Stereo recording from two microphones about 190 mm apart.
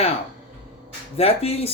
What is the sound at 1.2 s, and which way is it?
Speech, 30° left (ahead or behind).